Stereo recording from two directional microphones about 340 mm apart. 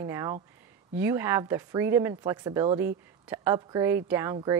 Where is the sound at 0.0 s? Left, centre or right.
Centre.